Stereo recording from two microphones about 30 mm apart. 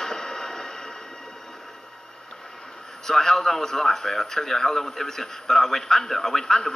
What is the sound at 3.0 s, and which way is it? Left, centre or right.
A man's voice, centre.